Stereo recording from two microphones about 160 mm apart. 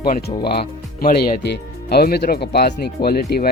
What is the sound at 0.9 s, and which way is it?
Speech, 65° left (ahead or behind).